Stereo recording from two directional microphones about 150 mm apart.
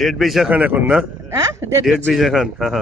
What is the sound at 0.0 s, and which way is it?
A man's voice, centre (ahead or behind).